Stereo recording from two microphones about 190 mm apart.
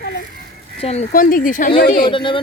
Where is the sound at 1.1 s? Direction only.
45° left (ahead or behind).